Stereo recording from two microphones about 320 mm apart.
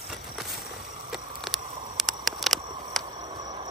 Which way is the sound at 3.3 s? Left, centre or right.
Centre.